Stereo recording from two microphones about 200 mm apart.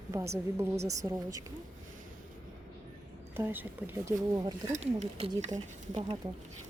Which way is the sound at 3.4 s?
10° right (ahead or behind).